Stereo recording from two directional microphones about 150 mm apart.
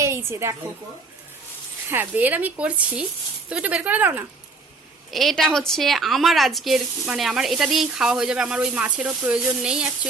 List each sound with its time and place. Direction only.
0.0 s a woman's voice: 20° right (ahead or behind)
1.9 s speech: 10° right (ahead or behind)
5.1 s speech: centre (ahead or behind)